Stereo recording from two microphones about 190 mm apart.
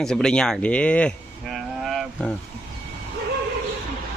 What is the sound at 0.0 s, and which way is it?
Speech, 5° left (ahead or behind).